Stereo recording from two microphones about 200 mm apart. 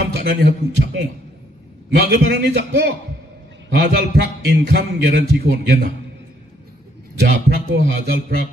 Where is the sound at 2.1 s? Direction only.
50° right (ahead or behind).